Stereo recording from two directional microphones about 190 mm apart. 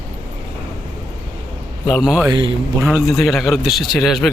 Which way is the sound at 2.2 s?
25° right (ahead or behind).